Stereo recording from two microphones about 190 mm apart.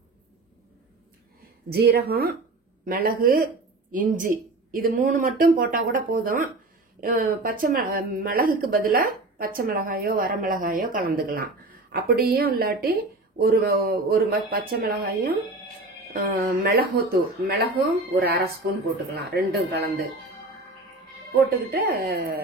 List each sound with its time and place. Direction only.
1.7 s speech: 55° right (ahead or behind)
21.9 s speech: 55° right (ahead or behind)